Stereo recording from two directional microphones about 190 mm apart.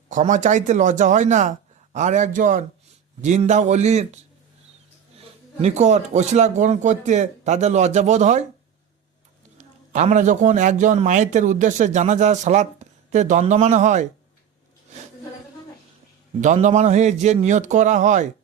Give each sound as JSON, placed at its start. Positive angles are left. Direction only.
{"t": 0.1, "sound": "a man's voice", "side_deg": -40}
{"t": 5.5, "sound": "a man's voice", "side_deg": -35}
{"t": 9.6, "sound": "a man's voice", "side_deg": -40}
{"t": 16.4, "sound": "a man's voice", "side_deg": -40}